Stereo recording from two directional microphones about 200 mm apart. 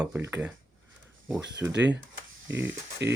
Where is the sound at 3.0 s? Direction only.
60° right (ahead or behind).